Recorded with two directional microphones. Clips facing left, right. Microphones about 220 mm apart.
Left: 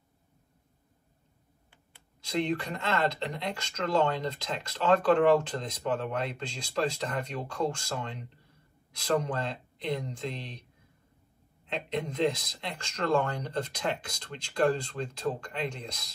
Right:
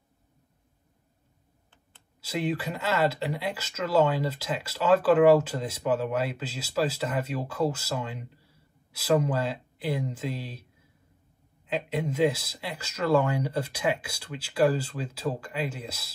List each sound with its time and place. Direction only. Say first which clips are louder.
2.2 s speech: even; 5° right (ahead or behind)